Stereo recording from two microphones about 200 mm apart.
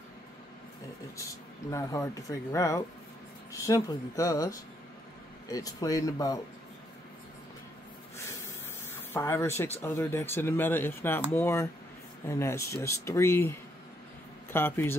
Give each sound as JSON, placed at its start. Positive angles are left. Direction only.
{"t": 1.7, "sound": "speech", "side_deg": 15}
{"t": 9.1, "sound": "speech", "side_deg": 10}